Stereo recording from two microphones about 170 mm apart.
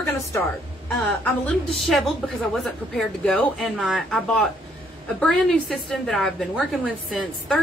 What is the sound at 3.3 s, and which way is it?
A woman's voice, 5° left (ahead or behind).